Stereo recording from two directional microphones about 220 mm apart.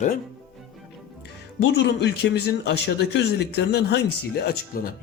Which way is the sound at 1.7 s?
50° left (ahead or behind).